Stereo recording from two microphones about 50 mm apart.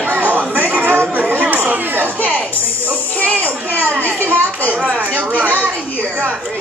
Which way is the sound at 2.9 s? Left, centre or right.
Left.